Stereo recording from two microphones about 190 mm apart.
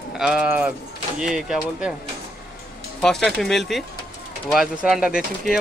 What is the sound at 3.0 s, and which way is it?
Speech, centre (ahead or behind).